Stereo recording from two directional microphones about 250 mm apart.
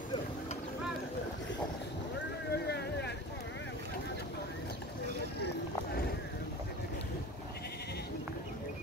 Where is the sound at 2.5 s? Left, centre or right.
Left.